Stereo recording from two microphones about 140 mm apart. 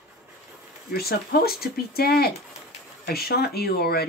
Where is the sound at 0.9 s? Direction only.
90° left.